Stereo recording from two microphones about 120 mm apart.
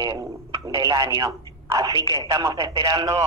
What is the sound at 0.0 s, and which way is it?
A man's voice, 30° right (ahead or behind).